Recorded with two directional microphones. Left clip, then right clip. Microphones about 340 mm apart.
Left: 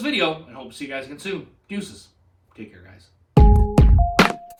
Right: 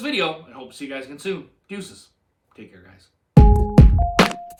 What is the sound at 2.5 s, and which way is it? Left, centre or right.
Music, centre.